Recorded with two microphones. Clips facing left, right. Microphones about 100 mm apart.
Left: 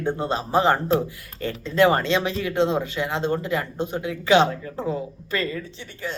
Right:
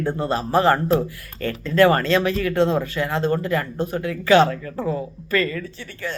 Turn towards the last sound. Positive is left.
turn(degrees=20)  # may be behind; listen again after turning